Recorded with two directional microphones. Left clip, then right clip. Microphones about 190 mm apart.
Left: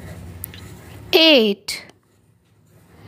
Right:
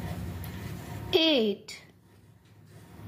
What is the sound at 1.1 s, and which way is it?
Speech, 55° left (ahead or behind).